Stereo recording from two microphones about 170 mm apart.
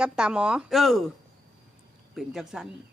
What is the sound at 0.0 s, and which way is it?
Speech, 5° right (ahead or behind).